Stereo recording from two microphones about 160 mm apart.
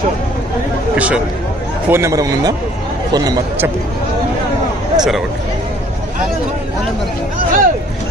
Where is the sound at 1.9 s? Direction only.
20° right (ahead or behind).